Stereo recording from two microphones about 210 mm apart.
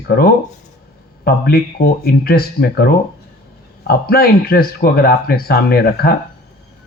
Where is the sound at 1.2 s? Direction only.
45° left (ahead or behind).